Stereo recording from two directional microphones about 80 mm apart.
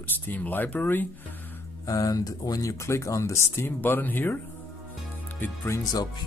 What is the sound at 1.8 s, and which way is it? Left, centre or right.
Speech, left.